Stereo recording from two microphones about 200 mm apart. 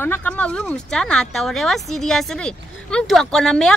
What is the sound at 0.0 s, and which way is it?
A woman's voice, 10° left (ahead or behind).